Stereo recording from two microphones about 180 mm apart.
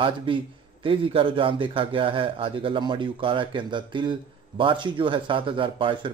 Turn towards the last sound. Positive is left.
turn(degrees=-30)  # may be behind; listen again after turning